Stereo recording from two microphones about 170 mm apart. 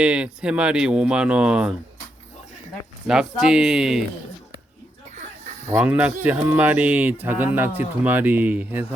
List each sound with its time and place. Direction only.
0.0 s speech: 5° right (ahead or behind)
3.1 s speech: 5° right (ahead or behind)
5.7 s speech: 5° right (ahead or behind)